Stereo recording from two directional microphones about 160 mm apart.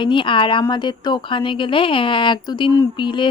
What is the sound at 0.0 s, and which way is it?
A woman's voice, 30° left (ahead or behind).